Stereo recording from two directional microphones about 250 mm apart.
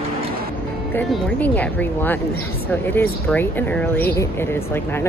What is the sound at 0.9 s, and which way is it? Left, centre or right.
Speech, centre.